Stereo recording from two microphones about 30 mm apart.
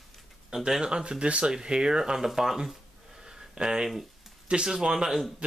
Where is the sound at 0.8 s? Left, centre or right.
Right.